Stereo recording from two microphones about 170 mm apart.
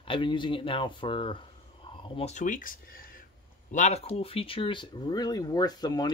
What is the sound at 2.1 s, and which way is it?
Speech, 40° left (ahead or behind).